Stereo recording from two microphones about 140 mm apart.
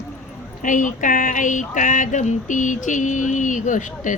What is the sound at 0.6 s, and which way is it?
Speech, 65° left (ahead or behind).